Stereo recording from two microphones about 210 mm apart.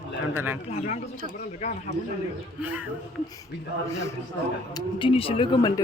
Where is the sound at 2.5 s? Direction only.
5° right (ahead or behind).